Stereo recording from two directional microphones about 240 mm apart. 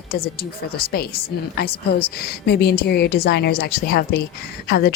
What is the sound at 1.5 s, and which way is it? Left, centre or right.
Speech, left.